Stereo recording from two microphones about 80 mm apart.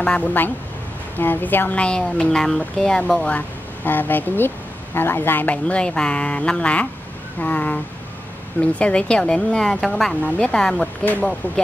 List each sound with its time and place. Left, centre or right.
0.0 s a woman's voice: centre
11.4 s a woman's voice: left